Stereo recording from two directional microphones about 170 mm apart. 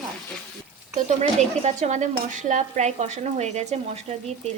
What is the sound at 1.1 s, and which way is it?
Speech, 45° right (ahead or behind).